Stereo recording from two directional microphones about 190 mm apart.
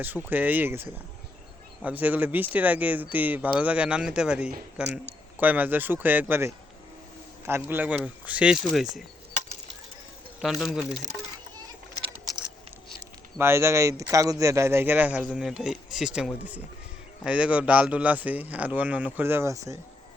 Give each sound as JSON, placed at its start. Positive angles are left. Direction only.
{"t": 0.3, "sound": "speech", "side_deg": -10}
{"t": 10.4, "sound": "speech", "side_deg": 0}
{"t": 13.4, "sound": "speech", "side_deg": -15}